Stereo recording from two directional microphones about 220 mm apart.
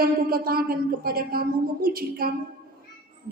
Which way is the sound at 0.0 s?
40° right (ahead or behind).